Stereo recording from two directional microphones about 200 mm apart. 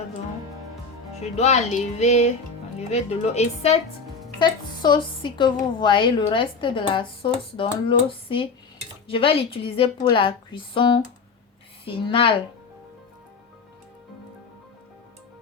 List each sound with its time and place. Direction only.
1.2 s a woman's voice: 35° left (ahead or behind)